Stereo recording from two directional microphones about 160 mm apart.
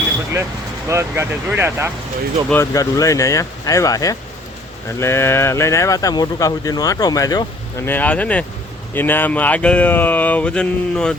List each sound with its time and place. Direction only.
0.9 s speech: 15° right (ahead or behind)
2.5 s speech: 20° left (ahead or behind)
7.9 s speech: 10° left (ahead or behind)